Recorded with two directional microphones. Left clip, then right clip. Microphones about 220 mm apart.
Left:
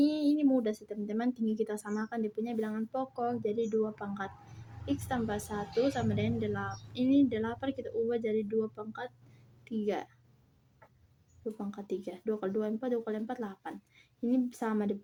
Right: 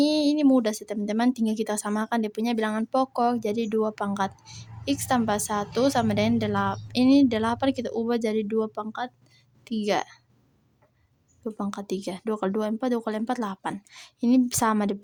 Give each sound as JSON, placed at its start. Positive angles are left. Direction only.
{"t": 0.0, "sound": "a woman's voice", "side_deg": -45}
{"t": 11.5, "sound": "a woman's voice", "side_deg": -50}